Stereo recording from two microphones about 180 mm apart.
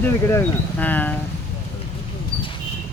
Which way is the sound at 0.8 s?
10° left (ahead or behind).